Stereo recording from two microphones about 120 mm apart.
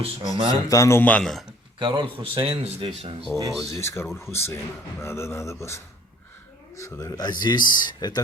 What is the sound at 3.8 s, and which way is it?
Speech, 20° left (ahead or behind).